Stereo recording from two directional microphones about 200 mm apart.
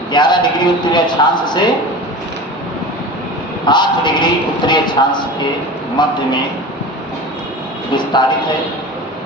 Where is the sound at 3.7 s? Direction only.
20° left (ahead or behind).